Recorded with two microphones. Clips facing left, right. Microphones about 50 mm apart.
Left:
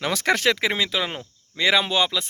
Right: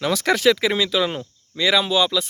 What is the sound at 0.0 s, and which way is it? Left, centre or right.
Speech, left.